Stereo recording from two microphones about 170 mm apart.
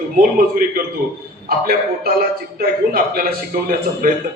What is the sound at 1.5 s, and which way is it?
A man's voice, 60° right (ahead or behind).